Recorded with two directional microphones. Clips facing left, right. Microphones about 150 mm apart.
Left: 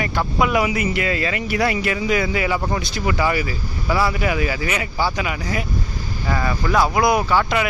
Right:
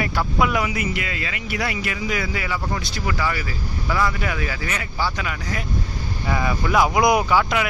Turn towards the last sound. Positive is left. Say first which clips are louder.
# left 1 dB
turn(degrees=-5)  # may be behind; listen again after turning